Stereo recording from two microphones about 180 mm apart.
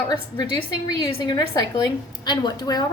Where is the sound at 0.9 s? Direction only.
20° left (ahead or behind).